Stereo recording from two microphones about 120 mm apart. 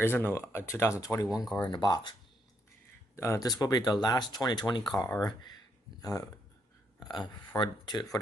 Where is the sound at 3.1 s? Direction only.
25° left (ahead or behind).